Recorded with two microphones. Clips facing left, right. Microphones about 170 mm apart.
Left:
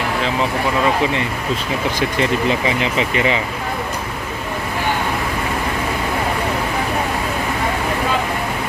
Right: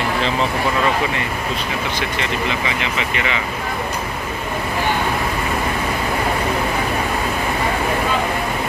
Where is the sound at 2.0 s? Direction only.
40° left (ahead or behind).